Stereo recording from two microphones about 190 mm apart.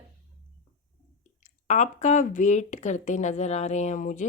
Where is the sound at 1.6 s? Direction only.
40° left (ahead or behind).